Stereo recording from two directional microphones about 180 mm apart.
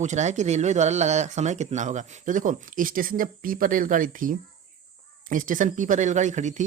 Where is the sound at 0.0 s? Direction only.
40° right (ahead or behind).